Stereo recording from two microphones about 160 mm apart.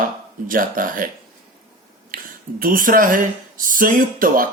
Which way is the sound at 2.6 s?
60° right (ahead or behind).